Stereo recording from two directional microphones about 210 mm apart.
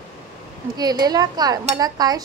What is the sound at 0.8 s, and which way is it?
Speech, 20° right (ahead or behind).